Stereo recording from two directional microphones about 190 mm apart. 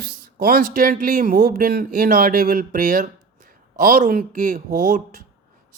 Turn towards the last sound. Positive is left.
turn(degrees=-45)  # may be behind; listen again after turning